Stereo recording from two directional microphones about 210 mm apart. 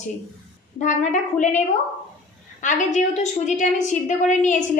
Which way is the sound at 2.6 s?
35° left (ahead or behind).